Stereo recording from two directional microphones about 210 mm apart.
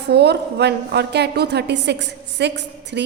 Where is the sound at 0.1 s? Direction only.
50° right (ahead or behind).